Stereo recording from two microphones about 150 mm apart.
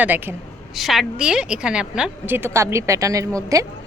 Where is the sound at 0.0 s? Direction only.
10° right (ahead or behind).